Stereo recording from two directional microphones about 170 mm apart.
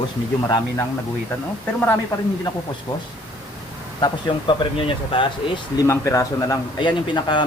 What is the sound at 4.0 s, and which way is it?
A man's voice, 30° left (ahead or behind).